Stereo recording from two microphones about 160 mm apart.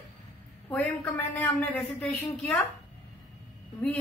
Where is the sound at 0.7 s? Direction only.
10° left (ahead or behind).